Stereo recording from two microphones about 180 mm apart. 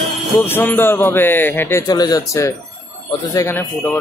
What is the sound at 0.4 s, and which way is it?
A man's voice, 10° left (ahead or behind).